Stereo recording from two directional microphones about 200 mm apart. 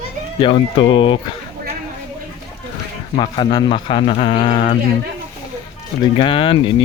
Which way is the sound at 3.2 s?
25° left (ahead or behind).